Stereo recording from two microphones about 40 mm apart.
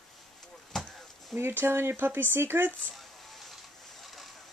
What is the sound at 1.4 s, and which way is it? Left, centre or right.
Speech, right.